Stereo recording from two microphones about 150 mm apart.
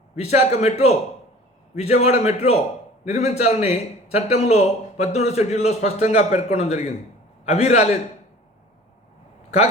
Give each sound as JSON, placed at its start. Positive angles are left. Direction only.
{"t": 0.2, "sound": "a man's voice", "side_deg": 45}